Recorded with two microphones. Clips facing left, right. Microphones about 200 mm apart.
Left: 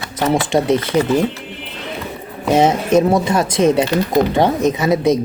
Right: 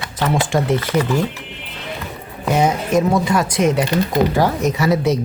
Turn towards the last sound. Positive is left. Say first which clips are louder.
# left 2 dB
turn(degrees=20)  # may be behind; listen again after turning